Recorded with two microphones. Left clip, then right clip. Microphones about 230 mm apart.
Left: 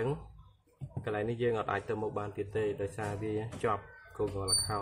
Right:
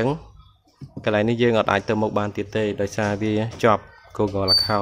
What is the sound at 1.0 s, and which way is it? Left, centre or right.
Speech, right.